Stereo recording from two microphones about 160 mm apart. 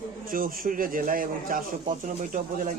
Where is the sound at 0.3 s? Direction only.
60° right (ahead or behind).